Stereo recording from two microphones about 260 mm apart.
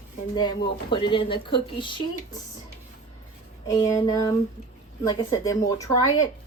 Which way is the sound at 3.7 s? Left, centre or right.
Centre.